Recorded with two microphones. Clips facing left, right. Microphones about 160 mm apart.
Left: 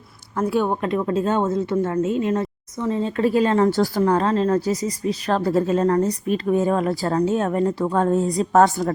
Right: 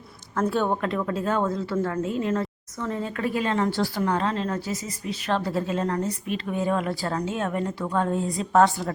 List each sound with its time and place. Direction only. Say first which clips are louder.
0.3 s speech: left 3 dB; 10° left (ahead or behind)
0.8 s speech: left 5 dB; 20° left (ahead or behind); by 8.9 s 45° left (ahead or behind)